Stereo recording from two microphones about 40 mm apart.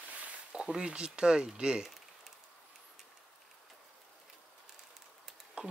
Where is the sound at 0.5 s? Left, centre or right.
Centre.